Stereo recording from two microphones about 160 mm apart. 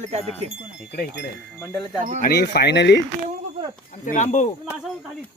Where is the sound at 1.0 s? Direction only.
90° left.